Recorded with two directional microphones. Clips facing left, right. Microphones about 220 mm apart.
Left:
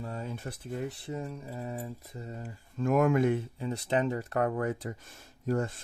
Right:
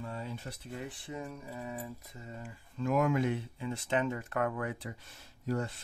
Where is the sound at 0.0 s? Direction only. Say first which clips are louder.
Left 3 dB; 45° left (ahead or behind).